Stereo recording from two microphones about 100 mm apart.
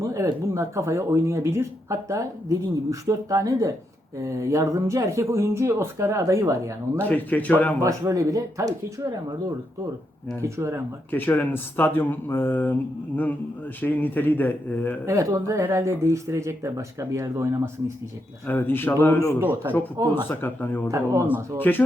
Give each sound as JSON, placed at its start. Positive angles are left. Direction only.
{"t": 0.0, "sound": "speech", "side_deg": -30}
{"t": 7.0, "sound": "speech", "side_deg": 15}
{"t": 7.9, "sound": "speech", "side_deg": -30}
{"t": 10.4, "sound": "speech", "side_deg": -30}
{"t": 11.1, "sound": "speech", "side_deg": 15}
{"t": 13.8, "sound": "speech", "side_deg": 20}
{"t": 15.0, "sound": "speech", "side_deg": -30}
{"t": 18.4, "sound": "speech", "side_deg": 20}
{"t": 19.4, "sound": "speech", "side_deg": -20}
{"t": 20.0, "sound": "speech", "side_deg": -40}
{"t": 20.3, "sound": "speech", "side_deg": 20}